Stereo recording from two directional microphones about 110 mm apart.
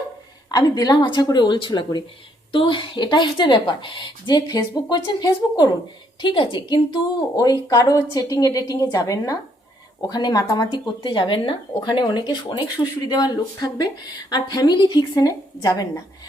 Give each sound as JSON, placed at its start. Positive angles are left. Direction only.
{"t": 0.5, "sound": "a woman's voice", "side_deg": 35}
{"t": 11.0, "sound": "a woman's voice", "side_deg": 45}